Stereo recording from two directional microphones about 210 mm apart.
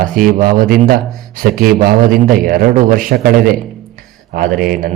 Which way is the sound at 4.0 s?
40° right (ahead or behind).